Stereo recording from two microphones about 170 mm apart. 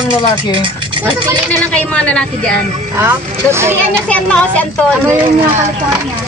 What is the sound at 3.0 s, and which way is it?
Speech, 15° right (ahead or behind).